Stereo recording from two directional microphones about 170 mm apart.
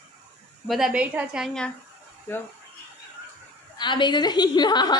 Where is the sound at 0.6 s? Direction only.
Centre (ahead or behind).